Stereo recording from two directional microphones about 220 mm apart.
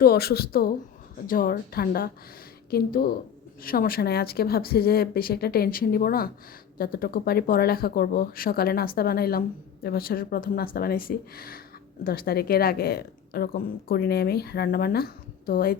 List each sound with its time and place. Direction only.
0.0 s a woman's voice: 45° left (ahead or behind)